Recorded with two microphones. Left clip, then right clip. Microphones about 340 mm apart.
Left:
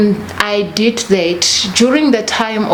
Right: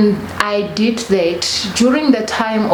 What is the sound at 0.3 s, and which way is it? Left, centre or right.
Speech, left.